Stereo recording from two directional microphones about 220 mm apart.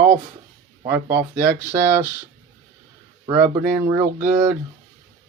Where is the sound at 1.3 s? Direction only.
35° right (ahead or behind).